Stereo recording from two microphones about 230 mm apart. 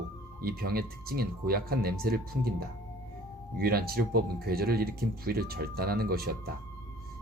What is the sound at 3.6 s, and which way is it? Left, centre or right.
Speech, right.